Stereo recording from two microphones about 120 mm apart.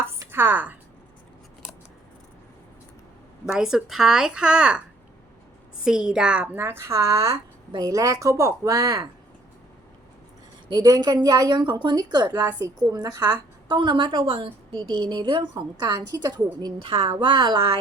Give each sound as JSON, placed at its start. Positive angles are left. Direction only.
{"t": 0.0, "sound": "a sound", "side_deg": -20}
{"t": 3.4, "sound": "a woman's voice", "side_deg": -5}
{"t": 5.8, "sound": "a woman's voice", "side_deg": -5}
{"t": 10.7, "sound": "a woman's voice", "side_deg": -30}
{"t": 16.8, "sound": "a woman's voice", "side_deg": -50}